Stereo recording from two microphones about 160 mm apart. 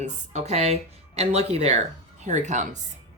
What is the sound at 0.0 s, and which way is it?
Speech, 45° right (ahead or behind).